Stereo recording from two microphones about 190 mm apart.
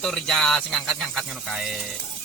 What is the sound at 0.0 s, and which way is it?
Speech, centre (ahead or behind).